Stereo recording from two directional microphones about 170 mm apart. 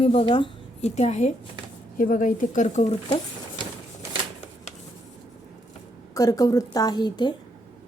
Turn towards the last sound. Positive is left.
turn(degrees=25)  # may be behind; listen again after turning